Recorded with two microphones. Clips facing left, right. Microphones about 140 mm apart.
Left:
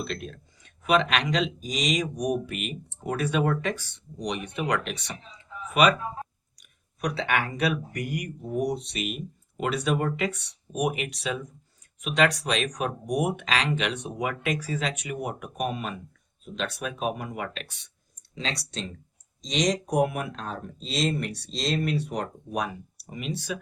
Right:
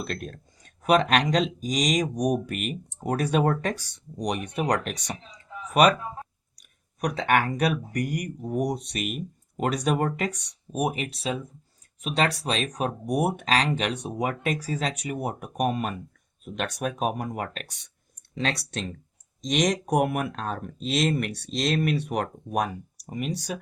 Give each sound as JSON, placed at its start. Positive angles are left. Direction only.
{"t": 0.0, "sound": "speech", "side_deg": -45}
{"t": 6.6, "sound": "speech", "side_deg": -45}
{"t": 18.3, "sound": "speech", "side_deg": -60}